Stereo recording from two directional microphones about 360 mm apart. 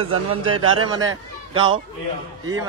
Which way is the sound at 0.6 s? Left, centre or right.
Right.